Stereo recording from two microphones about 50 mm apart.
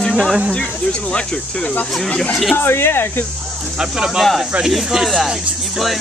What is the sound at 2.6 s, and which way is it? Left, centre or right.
Speech, left.